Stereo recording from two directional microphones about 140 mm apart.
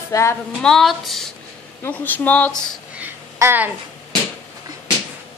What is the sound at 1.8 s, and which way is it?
Speech, 15° left (ahead or behind).